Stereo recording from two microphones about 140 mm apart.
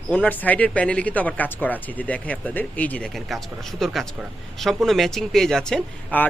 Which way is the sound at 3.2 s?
Centre (ahead or behind).